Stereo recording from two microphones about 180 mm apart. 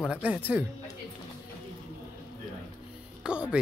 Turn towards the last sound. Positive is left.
turn(degrees=-5)  # may be behind; listen again after turning